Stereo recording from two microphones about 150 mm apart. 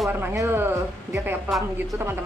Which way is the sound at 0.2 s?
15° right (ahead or behind).